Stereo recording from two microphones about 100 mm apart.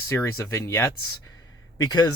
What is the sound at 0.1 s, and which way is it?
Speech, 25° left (ahead or behind).